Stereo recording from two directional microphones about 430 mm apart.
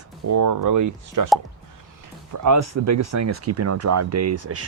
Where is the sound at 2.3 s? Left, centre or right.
Right.